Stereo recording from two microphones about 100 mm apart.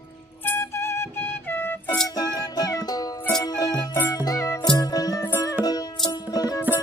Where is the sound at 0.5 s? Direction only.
25° left (ahead or behind).